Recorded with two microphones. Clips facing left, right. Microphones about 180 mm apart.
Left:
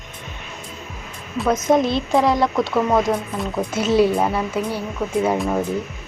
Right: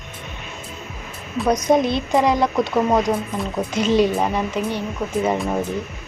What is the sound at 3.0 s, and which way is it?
Speech, centre (ahead or behind).